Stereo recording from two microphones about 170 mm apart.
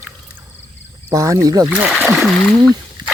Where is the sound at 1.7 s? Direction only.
5° right (ahead or behind).